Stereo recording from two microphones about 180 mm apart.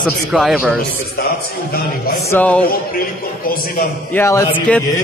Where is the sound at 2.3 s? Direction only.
10° left (ahead or behind).